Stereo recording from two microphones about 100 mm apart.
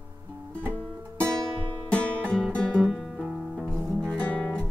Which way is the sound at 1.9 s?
10° left (ahead or behind).